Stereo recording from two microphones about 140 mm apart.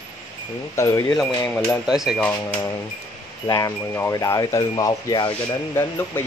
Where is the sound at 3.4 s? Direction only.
25° left (ahead or behind).